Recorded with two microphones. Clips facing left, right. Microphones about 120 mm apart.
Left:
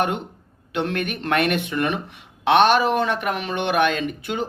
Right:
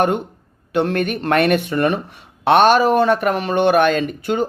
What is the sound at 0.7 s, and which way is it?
Speech, 45° right (ahead or behind).